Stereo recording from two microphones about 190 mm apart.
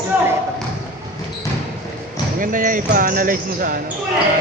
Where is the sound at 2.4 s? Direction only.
45° right (ahead or behind).